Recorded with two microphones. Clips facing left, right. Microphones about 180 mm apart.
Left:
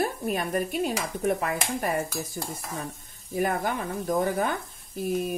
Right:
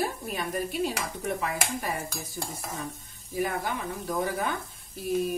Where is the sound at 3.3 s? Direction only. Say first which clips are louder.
Left 3 dB; 50° left (ahead or behind).